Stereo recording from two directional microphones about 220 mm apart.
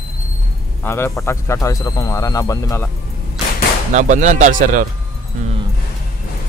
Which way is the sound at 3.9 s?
35° right (ahead or behind).